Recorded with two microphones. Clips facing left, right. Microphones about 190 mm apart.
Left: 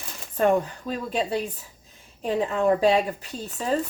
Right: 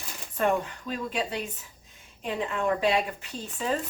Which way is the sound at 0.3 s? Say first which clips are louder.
Left 5 dB; 35° left (ahead or behind).